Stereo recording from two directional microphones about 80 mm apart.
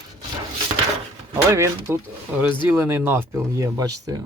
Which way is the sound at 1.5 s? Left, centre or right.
Right.